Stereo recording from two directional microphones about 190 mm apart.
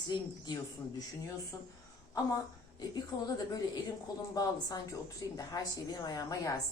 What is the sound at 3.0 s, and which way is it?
Speech, 20° left (ahead or behind).